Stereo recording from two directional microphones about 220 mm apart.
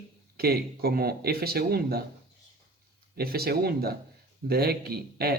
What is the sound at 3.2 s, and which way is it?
Speech, 45° right (ahead or behind).